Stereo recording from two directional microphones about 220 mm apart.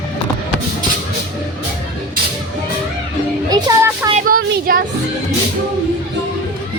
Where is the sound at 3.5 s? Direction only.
15° right (ahead or behind).